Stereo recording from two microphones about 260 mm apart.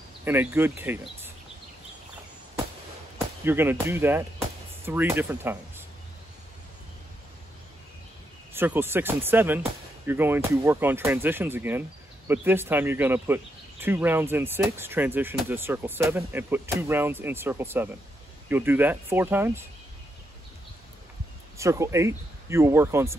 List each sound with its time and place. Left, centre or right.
0.2 s speech: centre
3.4 s speech: centre
8.5 s speech: centre
21.5 s speech: centre